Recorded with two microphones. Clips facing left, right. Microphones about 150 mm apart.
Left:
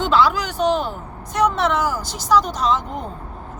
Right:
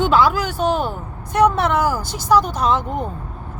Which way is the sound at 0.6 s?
45° right (ahead or behind).